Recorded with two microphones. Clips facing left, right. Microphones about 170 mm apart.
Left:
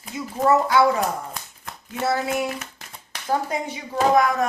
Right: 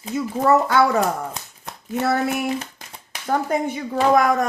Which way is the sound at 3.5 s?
50° right (ahead or behind).